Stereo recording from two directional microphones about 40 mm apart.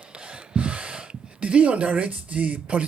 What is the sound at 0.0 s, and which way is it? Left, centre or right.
Speech, right.